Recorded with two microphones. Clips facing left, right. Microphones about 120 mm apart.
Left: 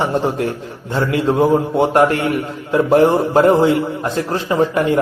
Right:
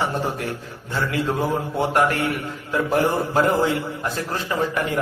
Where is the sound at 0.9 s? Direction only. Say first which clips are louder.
Left 7 dB; 25° left (ahead or behind).